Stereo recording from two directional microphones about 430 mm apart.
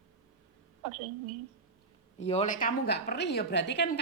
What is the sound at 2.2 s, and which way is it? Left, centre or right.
A woman's voice, centre.